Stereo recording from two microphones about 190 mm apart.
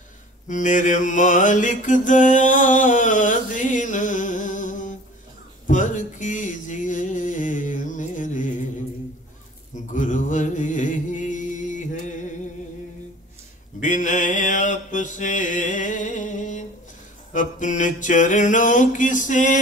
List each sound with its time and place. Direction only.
0.5 s mantra: 40° left (ahead or behind)
5.7 s music: 40° left (ahead or behind)
9.9 s music: 40° left (ahead or behind)
13.7 s mantra: 40° left (ahead or behind)
17.3 s music: 40° left (ahead or behind)